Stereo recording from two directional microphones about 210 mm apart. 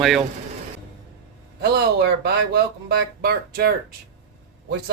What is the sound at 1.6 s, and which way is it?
A man's voice, 50° right (ahead or behind).